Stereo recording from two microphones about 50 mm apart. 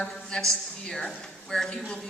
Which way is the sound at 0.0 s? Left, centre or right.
Centre.